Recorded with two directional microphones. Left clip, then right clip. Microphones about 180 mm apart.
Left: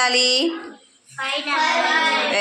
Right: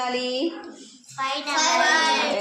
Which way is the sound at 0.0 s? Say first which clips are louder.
Left 8 dB; 10° left (ahead or behind).